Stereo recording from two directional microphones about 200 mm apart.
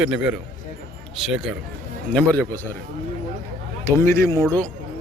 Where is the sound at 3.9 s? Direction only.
15° left (ahead or behind).